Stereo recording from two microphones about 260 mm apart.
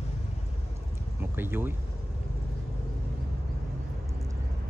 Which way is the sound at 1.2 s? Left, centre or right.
Centre.